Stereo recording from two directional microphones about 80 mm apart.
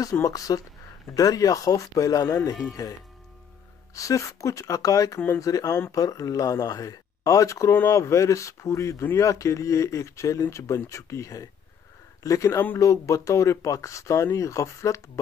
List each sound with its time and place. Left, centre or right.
0.0 s speech: left